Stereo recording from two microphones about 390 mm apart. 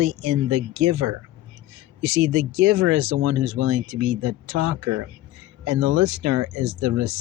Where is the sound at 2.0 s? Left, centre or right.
Right.